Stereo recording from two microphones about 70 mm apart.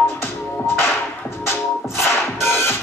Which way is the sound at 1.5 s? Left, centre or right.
Left.